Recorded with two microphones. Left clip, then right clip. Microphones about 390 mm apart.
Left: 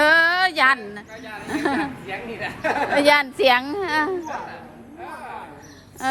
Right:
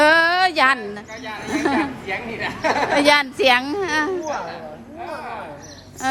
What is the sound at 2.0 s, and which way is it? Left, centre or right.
Speech, right.